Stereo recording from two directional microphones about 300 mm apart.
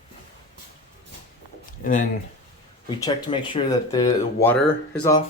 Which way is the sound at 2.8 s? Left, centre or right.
Centre.